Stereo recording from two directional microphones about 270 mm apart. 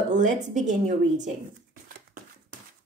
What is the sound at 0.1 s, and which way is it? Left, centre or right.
A woman's voice, right.